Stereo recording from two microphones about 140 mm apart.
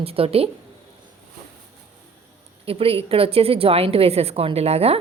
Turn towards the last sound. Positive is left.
turn(degrees=-45)  # may be behind; listen again after turning